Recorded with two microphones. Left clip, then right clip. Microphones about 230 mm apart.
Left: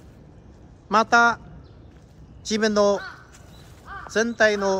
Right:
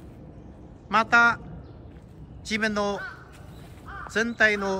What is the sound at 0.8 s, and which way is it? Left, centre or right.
Speech, centre.